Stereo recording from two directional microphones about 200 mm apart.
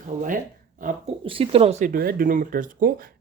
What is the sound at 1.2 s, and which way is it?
Speech, 25° right (ahead or behind).